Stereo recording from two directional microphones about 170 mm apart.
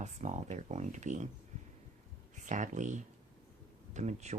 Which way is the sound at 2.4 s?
50° right (ahead or behind).